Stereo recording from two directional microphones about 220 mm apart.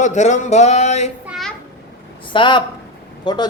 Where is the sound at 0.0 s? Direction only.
35° left (ahead or behind).